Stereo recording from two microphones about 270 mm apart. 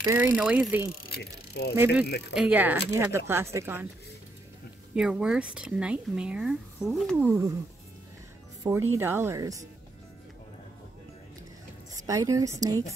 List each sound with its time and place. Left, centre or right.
0.0 s speech: centre
1.0 s speech: left
2.3 s speech: centre
4.9 s speech: centre
8.6 s speech: centre
11.9 s a woman's voice: centre